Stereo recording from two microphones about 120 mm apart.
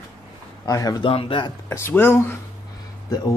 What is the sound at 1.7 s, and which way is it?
Speech, 20° left (ahead or behind).